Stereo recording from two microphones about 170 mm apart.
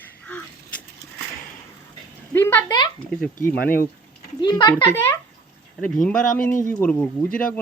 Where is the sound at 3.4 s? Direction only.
60° left (ahead or behind).